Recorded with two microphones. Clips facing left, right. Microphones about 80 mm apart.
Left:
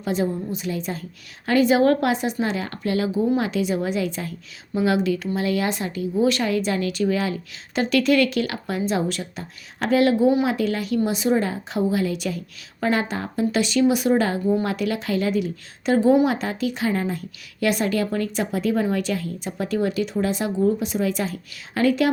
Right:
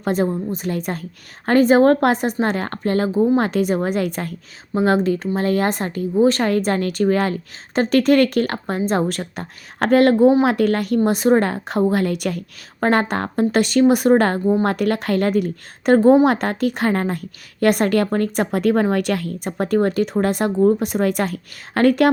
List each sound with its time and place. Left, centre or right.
0.0 s a woman's voice: right
1.5 s a woman's voice: right
4.7 s a woman's voice: right